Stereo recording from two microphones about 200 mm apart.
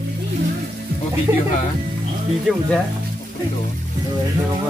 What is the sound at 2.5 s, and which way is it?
Speech, centre (ahead or behind).